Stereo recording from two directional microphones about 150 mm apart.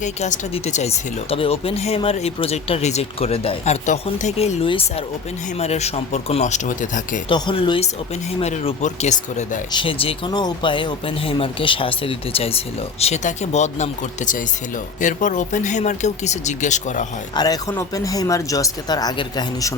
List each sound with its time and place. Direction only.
0.0 s speech: 50° left (ahead or behind)
7.3 s speech: 30° left (ahead or behind); by 9.6 s 50° left (ahead or behind)
9.7 s speech: 35° left (ahead or behind); by 17.1 s 55° left (ahead or behind)
17.3 s speech: 25° left (ahead or behind)